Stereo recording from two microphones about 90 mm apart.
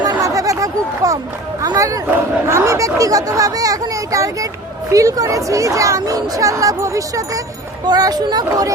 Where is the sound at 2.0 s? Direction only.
30° right (ahead or behind).